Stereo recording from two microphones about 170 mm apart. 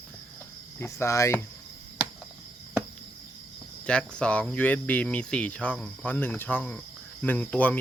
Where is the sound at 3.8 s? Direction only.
5° left (ahead or behind).